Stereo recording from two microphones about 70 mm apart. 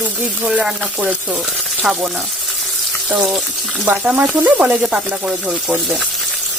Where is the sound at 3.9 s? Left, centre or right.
Centre.